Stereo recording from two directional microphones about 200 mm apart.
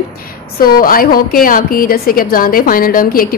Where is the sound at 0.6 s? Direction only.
45° left (ahead or behind).